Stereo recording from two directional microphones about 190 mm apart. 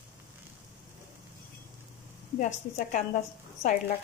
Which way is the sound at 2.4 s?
40° left (ahead or behind).